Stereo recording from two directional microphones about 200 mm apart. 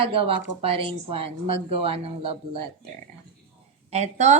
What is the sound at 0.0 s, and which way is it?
Speech, 25° right (ahead or behind).